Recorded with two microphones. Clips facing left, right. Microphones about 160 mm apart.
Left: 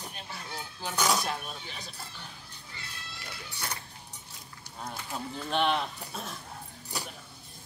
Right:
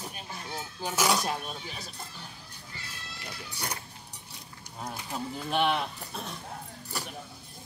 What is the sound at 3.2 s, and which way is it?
Speech, 15° right (ahead or behind).